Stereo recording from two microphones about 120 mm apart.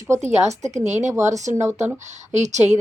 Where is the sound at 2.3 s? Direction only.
80° right.